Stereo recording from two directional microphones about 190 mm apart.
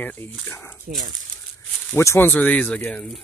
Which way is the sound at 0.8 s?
45° right (ahead or behind).